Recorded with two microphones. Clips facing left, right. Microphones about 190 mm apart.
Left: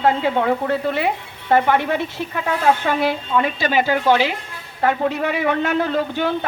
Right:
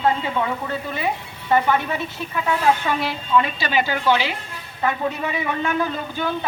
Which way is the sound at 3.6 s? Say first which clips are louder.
Left 3 dB; 50° left (ahead or behind).